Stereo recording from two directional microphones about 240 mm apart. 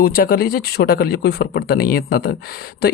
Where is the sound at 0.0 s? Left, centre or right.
Left.